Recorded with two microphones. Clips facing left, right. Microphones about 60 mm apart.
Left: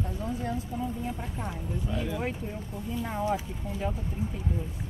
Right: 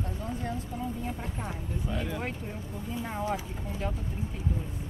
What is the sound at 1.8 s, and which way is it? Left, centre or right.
Speech, centre.